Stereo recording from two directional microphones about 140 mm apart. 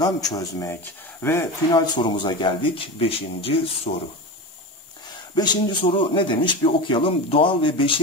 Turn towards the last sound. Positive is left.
turn(degrees=35)  # may be behind; listen again after turning